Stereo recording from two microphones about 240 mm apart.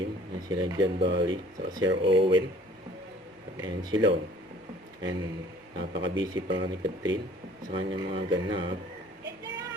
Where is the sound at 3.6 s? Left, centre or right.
Centre.